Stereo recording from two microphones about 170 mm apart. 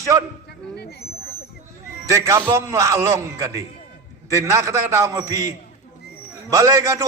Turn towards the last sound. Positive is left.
turn(degrees=-20)  # may be behind; listen again after turning